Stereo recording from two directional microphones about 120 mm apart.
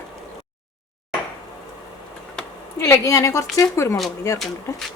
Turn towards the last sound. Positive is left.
turn(degrees=0)  # may be behind; listen again after turning